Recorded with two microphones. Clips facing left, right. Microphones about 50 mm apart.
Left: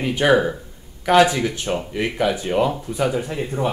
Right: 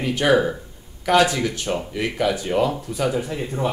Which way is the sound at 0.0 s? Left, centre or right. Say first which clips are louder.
Left 1 dB; centre.